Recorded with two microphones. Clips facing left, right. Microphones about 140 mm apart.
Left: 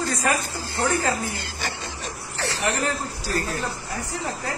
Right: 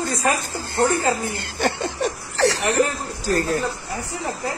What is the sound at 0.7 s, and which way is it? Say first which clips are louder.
Speech: right 4 dB; 55° right (ahead or behind).